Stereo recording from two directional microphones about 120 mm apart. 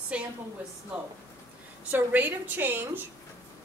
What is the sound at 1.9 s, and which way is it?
A woman's voice, 15° right (ahead or behind).